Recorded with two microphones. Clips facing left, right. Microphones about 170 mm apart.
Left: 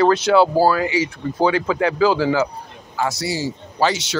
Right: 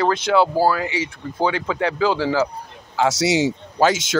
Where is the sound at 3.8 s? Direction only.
50° right (ahead or behind).